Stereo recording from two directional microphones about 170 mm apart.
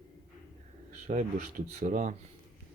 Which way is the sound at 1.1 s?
50° right (ahead or behind).